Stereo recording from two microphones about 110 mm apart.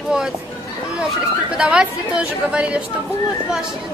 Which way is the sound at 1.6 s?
5° right (ahead or behind).